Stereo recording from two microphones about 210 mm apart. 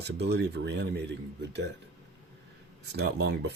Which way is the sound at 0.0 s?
50° right (ahead or behind).